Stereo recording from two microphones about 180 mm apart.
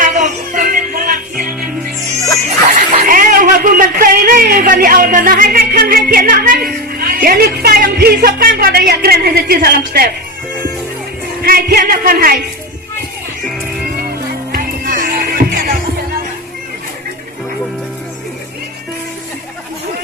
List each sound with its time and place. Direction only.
0.0 s music: 50° right (ahead or behind)
3.1 s a man's voice: 50° right (ahead or behind)
11.4 s music: 55° right (ahead or behind)
14.5 s music: 50° right (ahead or behind)